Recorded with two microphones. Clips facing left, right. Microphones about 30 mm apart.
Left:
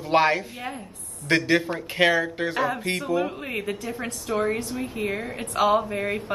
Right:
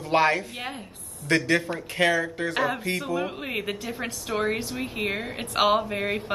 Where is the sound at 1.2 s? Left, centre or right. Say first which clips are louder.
Left 2 dB; left.